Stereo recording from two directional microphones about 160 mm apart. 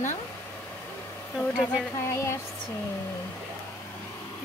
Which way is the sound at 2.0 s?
15° left (ahead or behind).